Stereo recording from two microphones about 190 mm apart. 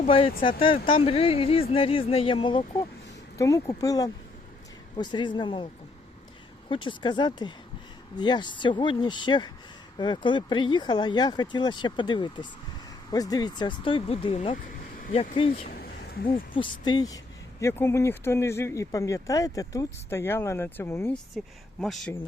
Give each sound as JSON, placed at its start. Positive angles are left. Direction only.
{"t": 0.0, "sound": "speech", "side_deg": 30}
{"t": 6.7, "sound": "speech", "side_deg": 25}
{"t": 15.7, "sound": "a sound", "side_deg": 55}
{"t": 16.6, "sound": "speech", "side_deg": 25}
{"t": 21.3, "sound": "speech", "side_deg": 0}